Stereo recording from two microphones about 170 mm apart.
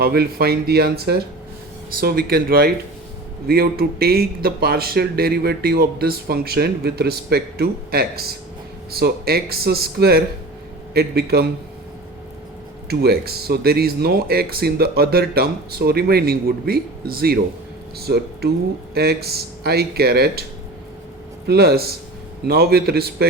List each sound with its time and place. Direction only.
0.0 s speech: 65° right (ahead or behind)
12.9 s speech: 65° right (ahead or behind)
21.4 s speech: 70° right (ahead or behind)